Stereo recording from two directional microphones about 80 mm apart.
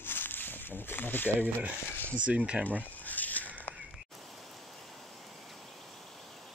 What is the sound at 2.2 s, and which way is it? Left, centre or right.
Speech, centre.